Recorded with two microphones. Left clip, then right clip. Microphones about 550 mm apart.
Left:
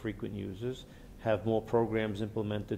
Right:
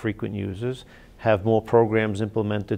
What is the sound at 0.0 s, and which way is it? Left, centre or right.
Speech, right.